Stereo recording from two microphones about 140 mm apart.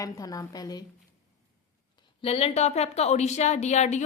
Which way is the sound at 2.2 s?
45° left (ahead or behind).